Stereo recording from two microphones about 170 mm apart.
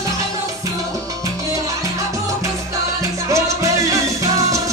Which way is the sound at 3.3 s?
20° right (ahead or behind).